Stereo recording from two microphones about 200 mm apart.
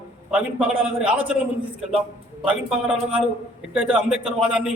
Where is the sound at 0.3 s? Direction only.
5° right (ahead or behind).